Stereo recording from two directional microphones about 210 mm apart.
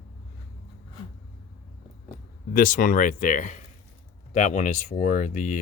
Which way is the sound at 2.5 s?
40° left (ahead or behind).